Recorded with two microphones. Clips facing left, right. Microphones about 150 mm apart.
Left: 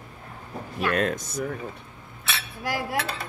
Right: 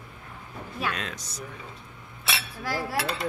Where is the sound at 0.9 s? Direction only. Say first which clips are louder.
Left 11 dB; 50° left (ahead or behind).